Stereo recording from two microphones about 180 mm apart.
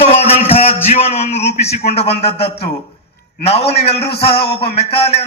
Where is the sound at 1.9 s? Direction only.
35° left (ahead or behind).